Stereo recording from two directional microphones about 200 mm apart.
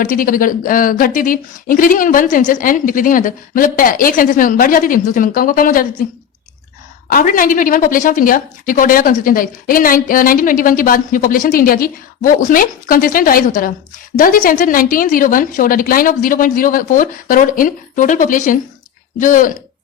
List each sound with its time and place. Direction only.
0.0 s a woman's voice: 45° left (ahead or behind)
7.1 s a woman's voice: 45° left (ahead or behind)